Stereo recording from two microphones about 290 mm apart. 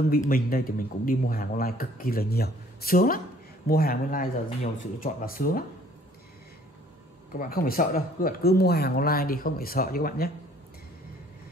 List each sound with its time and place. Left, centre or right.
0.1 s a man's voice: left
7.3 s a man's voice: left